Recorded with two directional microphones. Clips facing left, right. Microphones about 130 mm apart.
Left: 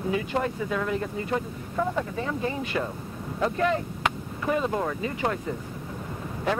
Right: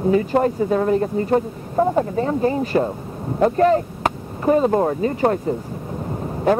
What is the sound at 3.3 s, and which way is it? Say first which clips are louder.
Speech: right 9 dB; 45° right (ahead or behind).